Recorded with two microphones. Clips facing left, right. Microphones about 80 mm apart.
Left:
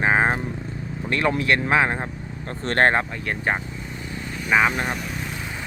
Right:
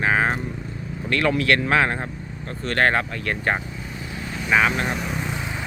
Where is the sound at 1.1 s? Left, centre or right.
Left.